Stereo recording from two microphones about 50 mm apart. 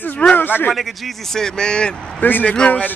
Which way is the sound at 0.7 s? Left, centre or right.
Centre.